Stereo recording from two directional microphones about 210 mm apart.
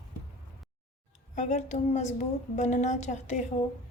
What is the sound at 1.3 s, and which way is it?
A woman's voice, 35° left (ahead or behind).